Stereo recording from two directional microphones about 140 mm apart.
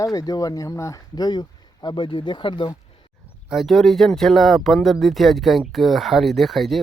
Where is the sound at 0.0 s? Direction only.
25° left (ahead or behind).